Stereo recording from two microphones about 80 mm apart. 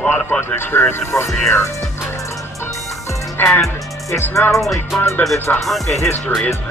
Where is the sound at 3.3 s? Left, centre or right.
Left.